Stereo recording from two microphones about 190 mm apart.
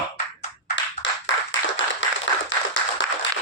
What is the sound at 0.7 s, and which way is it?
Clapping, 75° left (ahead or behind).